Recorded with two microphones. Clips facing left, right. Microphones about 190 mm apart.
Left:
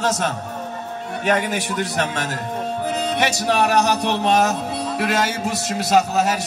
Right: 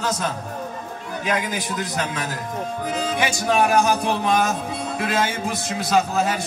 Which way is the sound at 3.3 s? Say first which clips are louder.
Right 2 dB; 75° left (ahead or behind).